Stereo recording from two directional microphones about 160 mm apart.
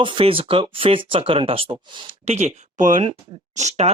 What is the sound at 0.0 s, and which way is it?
Speech, 30° right (ahead or behind).